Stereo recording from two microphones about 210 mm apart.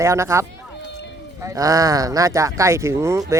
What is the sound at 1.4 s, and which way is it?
Speech, 15° right (ahead or behind).